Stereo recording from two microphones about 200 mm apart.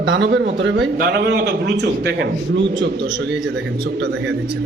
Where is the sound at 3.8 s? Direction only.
60° right (ahead or behind).